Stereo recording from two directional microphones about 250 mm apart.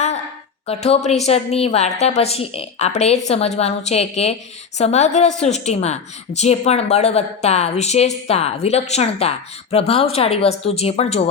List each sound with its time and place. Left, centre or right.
0.7 s a woman's voice: left